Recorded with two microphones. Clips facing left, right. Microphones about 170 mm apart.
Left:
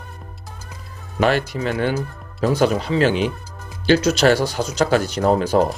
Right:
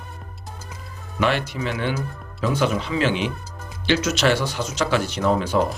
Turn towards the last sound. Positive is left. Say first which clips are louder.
# left 4 dB
turn(degrees=40)  # may be behind; listen again after turning